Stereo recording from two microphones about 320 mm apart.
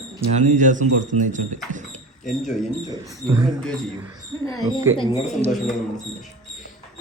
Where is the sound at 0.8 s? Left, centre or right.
Right.